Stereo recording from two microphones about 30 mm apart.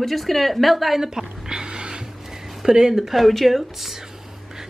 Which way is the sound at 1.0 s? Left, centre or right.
Right.